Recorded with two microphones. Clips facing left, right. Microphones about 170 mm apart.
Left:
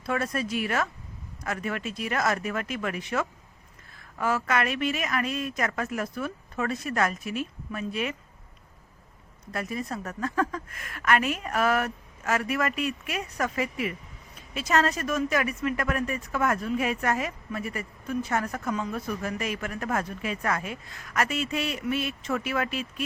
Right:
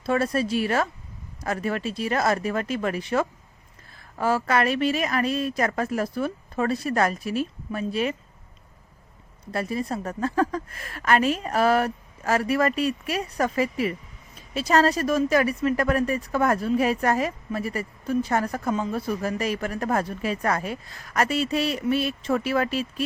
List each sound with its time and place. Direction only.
0.0 s speech: 30° right (ahead or behind)
9.5 s speech: 30° right (ahead or behind)